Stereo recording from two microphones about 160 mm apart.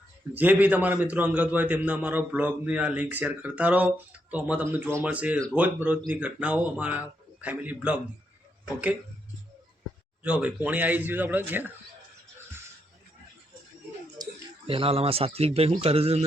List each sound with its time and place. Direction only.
0.3 s a man's voice: 10° right (ahead or behind)
10.2 s a man's voice: 10° right (ahead or behind)
14.7 s a man's voice: 35° right (ahead or behind)